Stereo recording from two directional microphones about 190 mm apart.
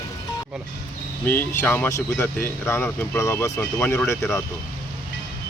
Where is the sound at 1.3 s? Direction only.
10° left (ahead or behind).